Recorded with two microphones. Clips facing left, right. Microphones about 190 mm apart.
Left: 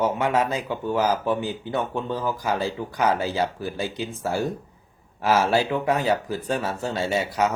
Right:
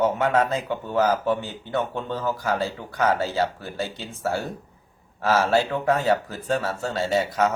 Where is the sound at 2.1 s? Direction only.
15° left (ahead or behind).